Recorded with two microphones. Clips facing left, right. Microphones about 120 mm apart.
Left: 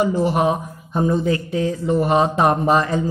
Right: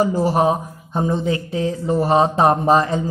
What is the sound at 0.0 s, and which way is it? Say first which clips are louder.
Speech: right 1 dB; 35° right (ahead or behind).